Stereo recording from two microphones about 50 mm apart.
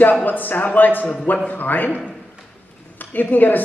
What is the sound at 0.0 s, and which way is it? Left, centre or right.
Speech, left.